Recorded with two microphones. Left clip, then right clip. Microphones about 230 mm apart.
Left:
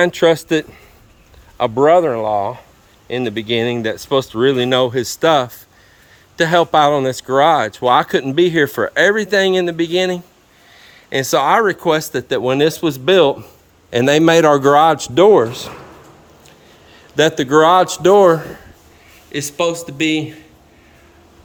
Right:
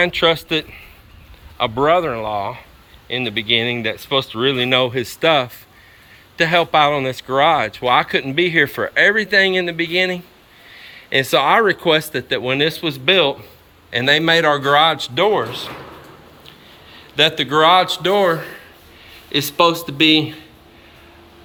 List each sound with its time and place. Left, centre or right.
0.0 s speech: left
8.9 s speech: left
17.2 s speech: left
19.3 s speech: centre